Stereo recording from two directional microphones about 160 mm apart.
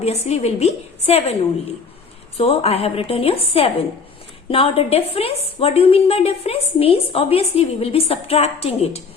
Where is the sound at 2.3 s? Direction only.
40° left (ahead or behind).